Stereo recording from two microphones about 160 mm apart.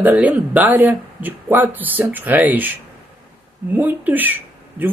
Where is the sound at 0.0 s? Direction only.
10° right (ahead or behind).